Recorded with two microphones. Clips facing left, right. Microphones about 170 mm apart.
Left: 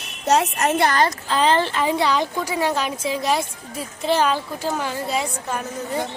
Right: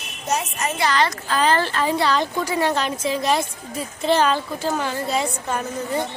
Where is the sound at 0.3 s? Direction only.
70° left (ahead or behind); by 1.1 s 50° left (ahead or behind).